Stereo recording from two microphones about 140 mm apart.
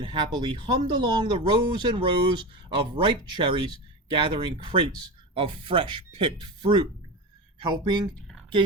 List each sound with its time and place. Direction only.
0.0 s speech: 35° right (ahead or behind)